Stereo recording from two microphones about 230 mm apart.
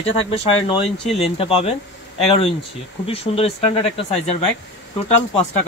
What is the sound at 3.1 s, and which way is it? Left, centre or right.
Speech, left.